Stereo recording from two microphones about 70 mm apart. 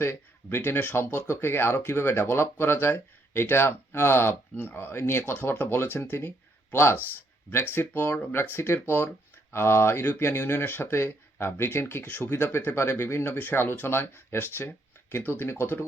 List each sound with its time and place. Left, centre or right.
0.0 s speech: left